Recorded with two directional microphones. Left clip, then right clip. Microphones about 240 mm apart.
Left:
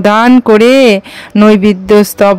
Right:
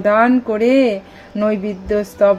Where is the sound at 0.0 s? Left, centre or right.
Left.